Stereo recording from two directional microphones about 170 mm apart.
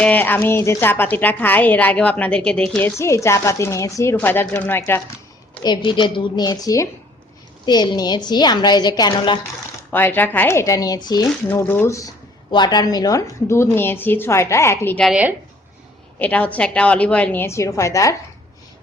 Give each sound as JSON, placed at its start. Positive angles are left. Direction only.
{"t": 0.0, "sound": "a woman's voice", "side_deg": 10}
{"t": 5.6, "sound": "a woman's voice", "side_deg": 30}
{"t": 9.9, "sound": "a woman's voice", "side_deg": 10}
{"t": 11.4, "sound": "a woman's voice", "side_deg": 10}
{"t": 15.0, "sound": "speech", "side_deg": -5}
{"t": 16.1, "sound": "a woman's voice", "side_deg": 10}